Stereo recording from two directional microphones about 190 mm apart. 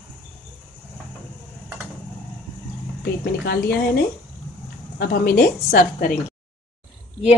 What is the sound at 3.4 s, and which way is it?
A woman's voice, 60° left (ahead or behind).